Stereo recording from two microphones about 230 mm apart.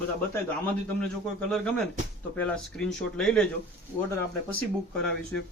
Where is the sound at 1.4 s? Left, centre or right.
Centre.